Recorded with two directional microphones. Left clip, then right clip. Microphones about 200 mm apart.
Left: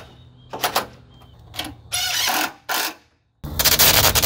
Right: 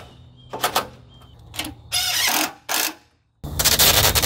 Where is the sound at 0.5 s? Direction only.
15° left (ahead or behind).